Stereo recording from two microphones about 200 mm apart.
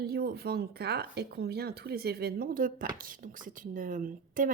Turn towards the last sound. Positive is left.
turn(degrees=-40)  # may be behind; listen again after turning